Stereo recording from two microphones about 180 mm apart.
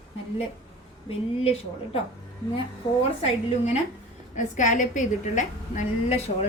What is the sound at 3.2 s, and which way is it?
A woman's voice, 35° left (ahead or behind).